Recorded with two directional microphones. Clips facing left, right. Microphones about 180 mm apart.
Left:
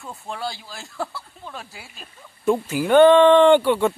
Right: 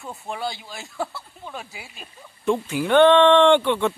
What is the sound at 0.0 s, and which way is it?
Speech, centre (ahead or behind).